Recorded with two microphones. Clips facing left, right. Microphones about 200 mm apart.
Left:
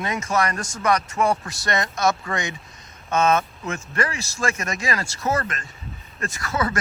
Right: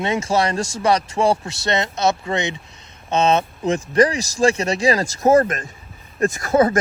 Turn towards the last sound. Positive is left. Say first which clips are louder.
# right 9 dB
turn(degrees=-50)  # may be behind; listen again after turning